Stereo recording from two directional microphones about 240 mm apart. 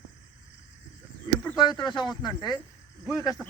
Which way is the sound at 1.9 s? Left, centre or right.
Centre.